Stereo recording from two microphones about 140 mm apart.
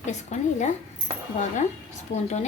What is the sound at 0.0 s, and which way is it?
Speech, 60° left (ahead or behind).